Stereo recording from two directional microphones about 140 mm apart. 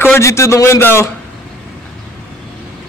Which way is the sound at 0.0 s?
20° left (ahead or behind).